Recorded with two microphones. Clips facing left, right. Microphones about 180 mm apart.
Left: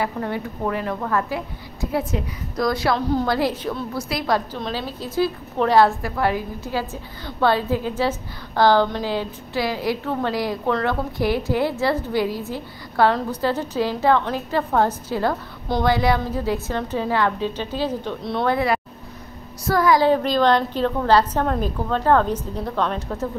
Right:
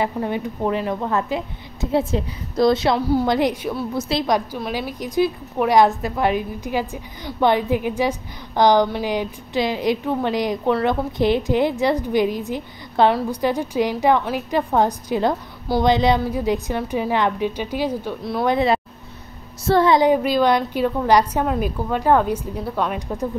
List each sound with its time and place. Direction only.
0.0 s a woman's voice: 15° right (ahead or behind)
20.1 s a woman's voice: 10° right (ahead or behind)